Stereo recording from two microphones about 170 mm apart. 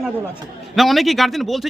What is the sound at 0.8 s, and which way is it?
Speech, centre (ahead or behind).